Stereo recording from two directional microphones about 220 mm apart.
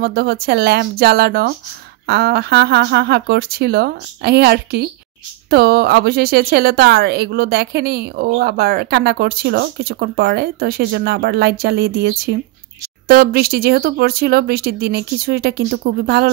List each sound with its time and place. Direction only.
0.0 s a woman's voice: 45° right (ahead or behind)